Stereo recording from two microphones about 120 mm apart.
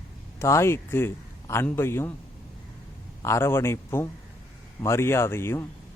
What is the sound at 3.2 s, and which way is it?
A man's voice, 20° left (ahead or behind).